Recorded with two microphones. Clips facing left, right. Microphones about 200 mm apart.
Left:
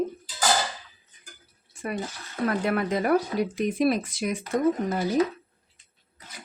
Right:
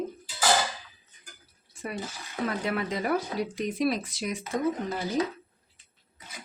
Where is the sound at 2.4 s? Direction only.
50° left (ahead or behind).